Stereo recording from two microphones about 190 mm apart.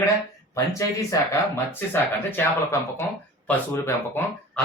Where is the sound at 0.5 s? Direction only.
15° left (ahead or behind).